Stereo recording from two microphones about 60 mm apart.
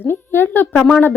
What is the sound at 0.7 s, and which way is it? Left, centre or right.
Speech, centre.